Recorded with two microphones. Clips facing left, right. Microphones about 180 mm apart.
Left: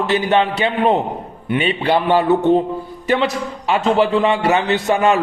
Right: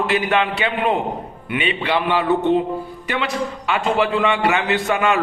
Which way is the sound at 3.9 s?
35° left (ahead or behind).